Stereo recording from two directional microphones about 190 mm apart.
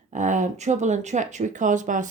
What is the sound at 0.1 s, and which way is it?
Speech, 40° right (ahead or behind).